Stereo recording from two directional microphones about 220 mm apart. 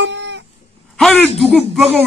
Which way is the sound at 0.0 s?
55° right (ahead or behind).